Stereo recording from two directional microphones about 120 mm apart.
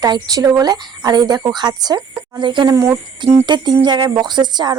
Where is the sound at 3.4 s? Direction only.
40° right (ahead or behind).